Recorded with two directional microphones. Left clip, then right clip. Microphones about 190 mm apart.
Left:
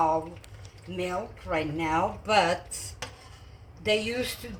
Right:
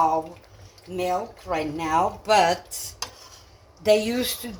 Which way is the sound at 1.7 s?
35° right (ahead or behind).